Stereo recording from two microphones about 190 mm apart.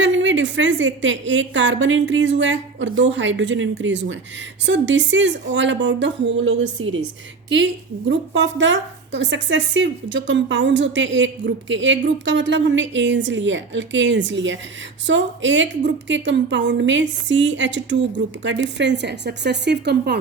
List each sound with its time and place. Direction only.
0.0 s a woman's voice: 80° right
7.5 s a woman's voice: 70° right (ahead or behind)